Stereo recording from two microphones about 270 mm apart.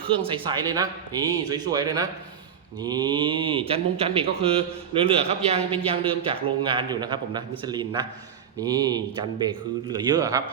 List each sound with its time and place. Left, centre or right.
0.2 s a man's voice: centre